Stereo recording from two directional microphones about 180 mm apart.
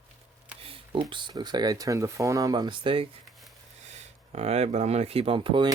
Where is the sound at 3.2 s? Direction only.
Centre (ahead or behind).